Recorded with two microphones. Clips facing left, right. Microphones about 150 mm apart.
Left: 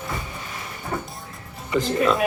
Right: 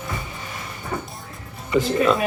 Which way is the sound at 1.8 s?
Centre (ahead or behind).